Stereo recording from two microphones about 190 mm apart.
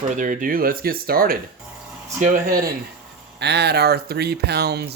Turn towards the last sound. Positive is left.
turn(degrees=-60)  # may be behind; listen again after turning